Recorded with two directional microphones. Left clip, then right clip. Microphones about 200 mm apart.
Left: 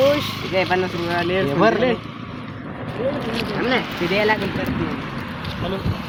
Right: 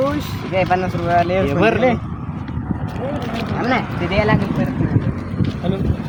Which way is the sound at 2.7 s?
55° right (ahead or behind).